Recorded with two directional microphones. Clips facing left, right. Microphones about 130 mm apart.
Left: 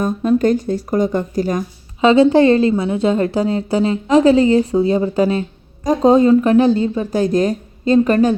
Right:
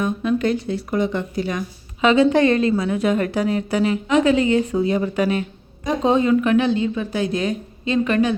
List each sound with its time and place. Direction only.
0.0 s speech: 40° left (ahead or behind)